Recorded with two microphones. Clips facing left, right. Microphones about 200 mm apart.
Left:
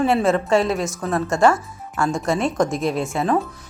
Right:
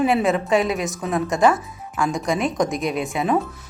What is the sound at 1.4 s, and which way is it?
Speech, centre (ahead or behind).